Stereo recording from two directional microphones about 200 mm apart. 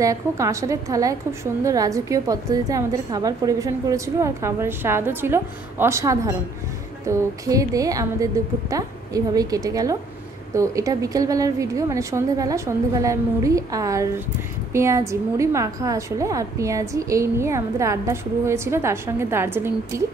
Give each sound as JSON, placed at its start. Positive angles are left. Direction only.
{"t": 0.0, "sound": "a woman's voice", "side_deg": -15}